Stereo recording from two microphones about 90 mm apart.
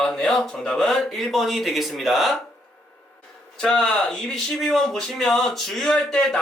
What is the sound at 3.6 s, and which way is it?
Speech, 5° left (ahead or behind).